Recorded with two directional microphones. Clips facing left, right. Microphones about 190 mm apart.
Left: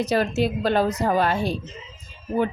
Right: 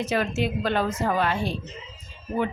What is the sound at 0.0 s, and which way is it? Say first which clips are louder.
Speech: left 4 dB; 35° left (ahead or behind).